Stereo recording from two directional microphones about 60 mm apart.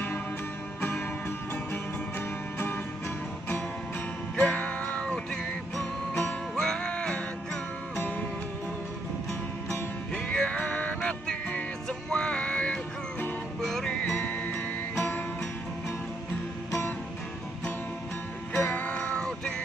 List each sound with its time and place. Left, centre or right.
0.7 s music: left
4.4 s music: left
10.1 s music: centre
13.6 s music: centre
14.1 s music: left
18.6 s music: left